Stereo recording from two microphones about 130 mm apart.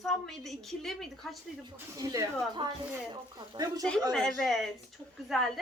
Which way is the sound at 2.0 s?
25° right (ahead or behind).